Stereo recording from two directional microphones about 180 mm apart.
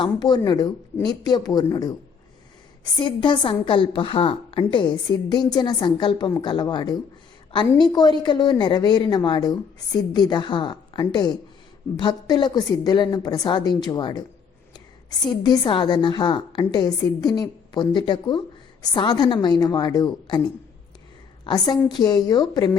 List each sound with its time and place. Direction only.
0.0 s a woman's voice: 25° left (ahead or behind)
3.0 s a woman's voice: 25° left (ahead or behind)
21.4 s a woman's voice: 25° left (ahead or behind)